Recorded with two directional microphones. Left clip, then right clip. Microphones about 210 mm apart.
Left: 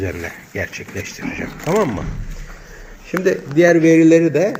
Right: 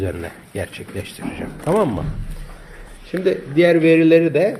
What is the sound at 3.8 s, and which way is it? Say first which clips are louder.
Speech: left 1 dB; 15° left (ahead or behind).